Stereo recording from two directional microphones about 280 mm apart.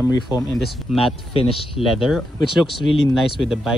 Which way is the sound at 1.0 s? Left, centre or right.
Centre.